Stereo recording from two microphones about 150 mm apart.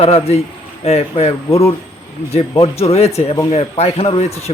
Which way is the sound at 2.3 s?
45° left (ahead or behind).